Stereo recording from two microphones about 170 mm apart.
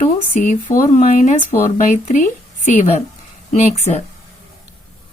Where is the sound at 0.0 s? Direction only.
45° left (ahead or behind).